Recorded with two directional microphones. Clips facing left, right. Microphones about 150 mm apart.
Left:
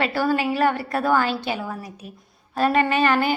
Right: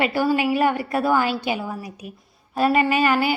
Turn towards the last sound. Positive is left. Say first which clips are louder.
# even
turn(degrees=-5)  # may be behind; listen again after turning